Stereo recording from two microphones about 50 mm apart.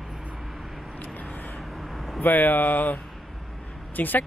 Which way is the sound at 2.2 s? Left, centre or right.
Left.